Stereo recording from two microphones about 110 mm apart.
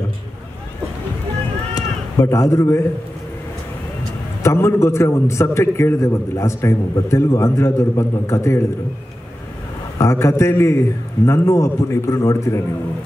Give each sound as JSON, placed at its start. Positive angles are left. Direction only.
{"t": 1.8, "sound": "a man's voice", "side_deg": 30}
{"t": 4.4, "sound": "a man's voice", "side_deg": 25}
{"t": 9.9, "sound": "a man's voice", "side_deg": 30}